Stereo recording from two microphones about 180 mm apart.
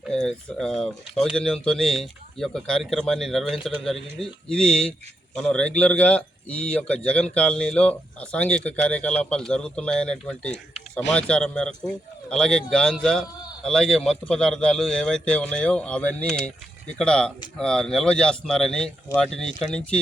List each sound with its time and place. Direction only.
0.0 s a man's voice: centre (ahead or behind)